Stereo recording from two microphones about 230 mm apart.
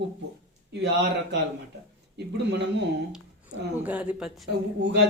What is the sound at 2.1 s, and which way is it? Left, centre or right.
Speech, right.